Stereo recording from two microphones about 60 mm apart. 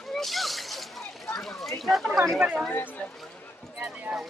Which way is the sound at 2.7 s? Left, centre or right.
Left.